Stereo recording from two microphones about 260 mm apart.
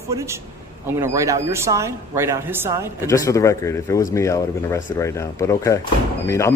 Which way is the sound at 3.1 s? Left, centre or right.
Centre.